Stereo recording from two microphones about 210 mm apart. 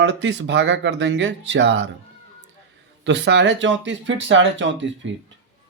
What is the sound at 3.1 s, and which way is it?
Speech, 55° right (ahead or behind).